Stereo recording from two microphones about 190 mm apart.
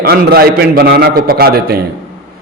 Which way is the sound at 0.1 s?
55° right (ahead or behind).